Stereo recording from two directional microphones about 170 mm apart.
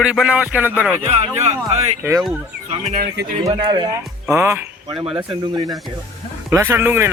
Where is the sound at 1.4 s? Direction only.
35° right (ahead or behind).